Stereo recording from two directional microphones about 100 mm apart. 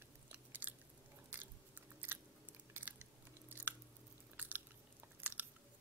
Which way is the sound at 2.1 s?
20° right (ahead or behind).